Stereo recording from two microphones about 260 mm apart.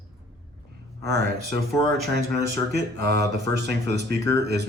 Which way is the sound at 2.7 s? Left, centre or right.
Right.